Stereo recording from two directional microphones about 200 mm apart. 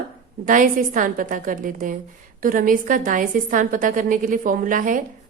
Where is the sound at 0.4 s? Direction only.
40° right (ahead or behind).